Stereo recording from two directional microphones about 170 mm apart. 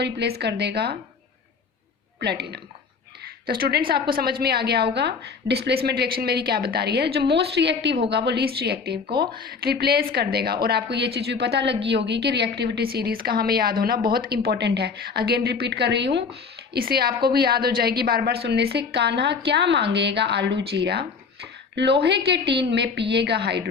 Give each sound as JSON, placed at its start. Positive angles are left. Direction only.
{"t": 0.0, "sound": "a woman's voice", "side_deg": -75}
{"t": 2.2, "sound": "a woman's voice", "side_deg": -75}
{"t": 3.4, "sound": "a woman's voice", "side_deg": -65}
{"t": 16.7, "sound": "a woman's voice", "side_deg": -65}
{"t": 22.0, "sound": "a woman's voice", "side_deg": -80}